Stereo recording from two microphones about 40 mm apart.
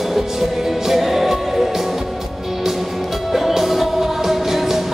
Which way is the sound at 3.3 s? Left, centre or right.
Centre.